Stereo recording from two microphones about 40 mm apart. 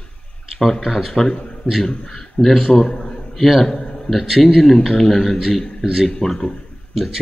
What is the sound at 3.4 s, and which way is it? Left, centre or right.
A man's voice, centre.